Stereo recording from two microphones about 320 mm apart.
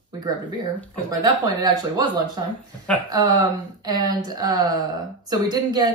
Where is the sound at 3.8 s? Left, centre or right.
Centre.